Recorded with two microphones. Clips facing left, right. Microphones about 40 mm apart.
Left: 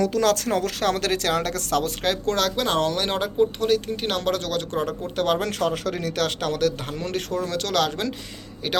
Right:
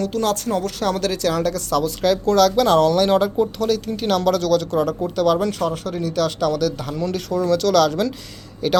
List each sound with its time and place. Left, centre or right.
0.3 s speech: left
2.0 s speech: left
5.1 s speech: left
5.4 s speech: left
7.3 s speech: left